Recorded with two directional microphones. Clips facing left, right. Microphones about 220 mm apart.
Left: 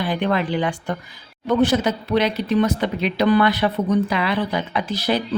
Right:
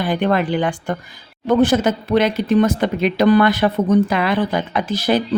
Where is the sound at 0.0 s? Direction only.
50° right (ahead or behind).